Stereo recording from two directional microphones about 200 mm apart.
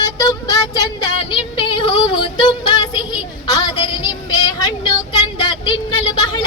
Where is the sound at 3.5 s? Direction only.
25° left (ahead or behind).